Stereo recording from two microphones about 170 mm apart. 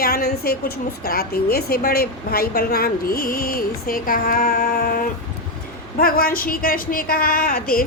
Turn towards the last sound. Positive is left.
turn(degrees=60)  # may be behind; listen again after turning